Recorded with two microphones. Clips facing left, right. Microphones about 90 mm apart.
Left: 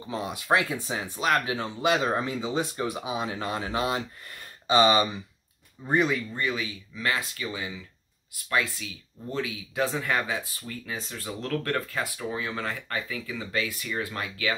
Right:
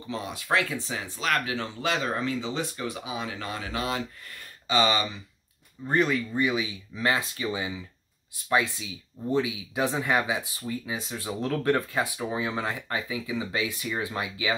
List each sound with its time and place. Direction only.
0.1 s speech: 20° left (ahead or behind)
5.9 s speech: 5° left (ahead or behind)
6.3 s speech: 15° right (ahead or behind)